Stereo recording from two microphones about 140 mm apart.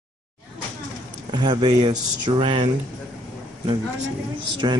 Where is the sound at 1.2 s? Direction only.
35° right (ahead or behind).